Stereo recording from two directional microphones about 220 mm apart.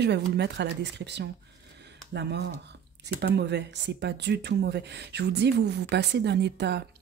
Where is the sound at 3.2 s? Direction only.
50° right (ahead or behind).